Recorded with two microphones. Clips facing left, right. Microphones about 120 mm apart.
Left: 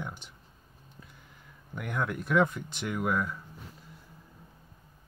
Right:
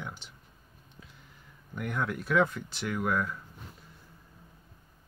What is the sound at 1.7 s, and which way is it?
Speech, 10° left (ahead or behind).